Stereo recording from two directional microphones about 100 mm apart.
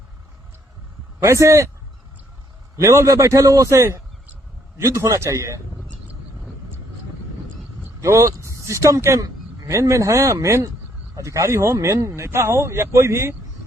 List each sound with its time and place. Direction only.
1.2 s speech: 30° right (ahead or behind)
2.7 s a man's voice: 30° right (ahead or behind)
7.9 s speech: 30° right (ahead or behind)